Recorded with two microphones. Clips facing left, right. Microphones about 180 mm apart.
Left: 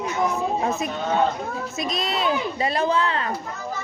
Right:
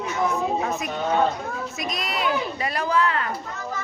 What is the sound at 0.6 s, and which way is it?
A woman's voice, 25° left (ahead or behind).